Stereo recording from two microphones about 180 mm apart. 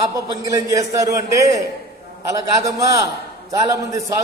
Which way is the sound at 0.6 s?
15° right (ahead or behind).